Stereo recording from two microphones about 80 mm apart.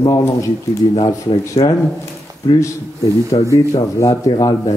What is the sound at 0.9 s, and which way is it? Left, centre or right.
Speech, left.